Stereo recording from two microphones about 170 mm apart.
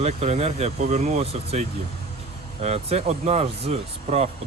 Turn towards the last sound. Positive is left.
turn(degrees=-40)  # may be behind; listen again after turning